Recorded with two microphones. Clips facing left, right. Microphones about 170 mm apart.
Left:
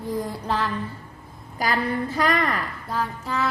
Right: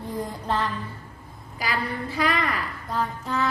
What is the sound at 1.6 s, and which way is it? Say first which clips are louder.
Speech: left 5 dB; 45° left (ahead or behind).